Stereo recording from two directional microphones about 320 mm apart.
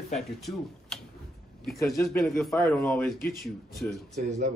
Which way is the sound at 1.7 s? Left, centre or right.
Centre.